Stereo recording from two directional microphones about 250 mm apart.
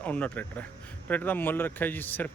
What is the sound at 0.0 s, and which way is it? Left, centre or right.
A man's voice, centre.